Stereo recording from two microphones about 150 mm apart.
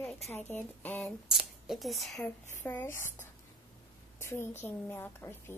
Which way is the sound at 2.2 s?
10° left (ahead or behind).